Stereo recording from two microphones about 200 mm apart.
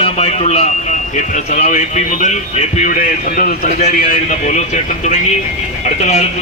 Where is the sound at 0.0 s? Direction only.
30° left (ahead or behind).